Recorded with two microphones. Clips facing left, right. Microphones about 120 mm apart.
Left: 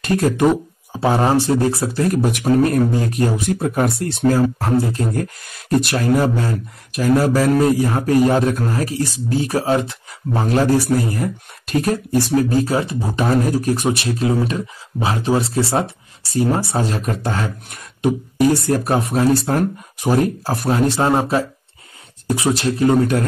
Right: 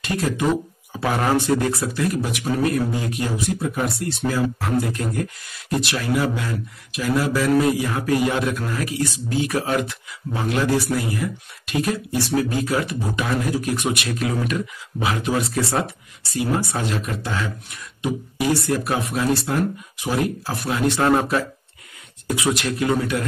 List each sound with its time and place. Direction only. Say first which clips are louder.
0.0 s speech: left 7 dB; 45° left (ahead or behind)
0.9 s a man's voice: left 4 dB; 30° left (ahead or behind)
21.0 s speech: left 2 dB; 25° left (ahead or behind); by 23.2 s 40° left (ahead or behind)